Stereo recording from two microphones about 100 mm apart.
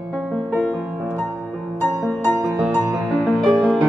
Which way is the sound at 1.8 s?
15° left (ahead or behind).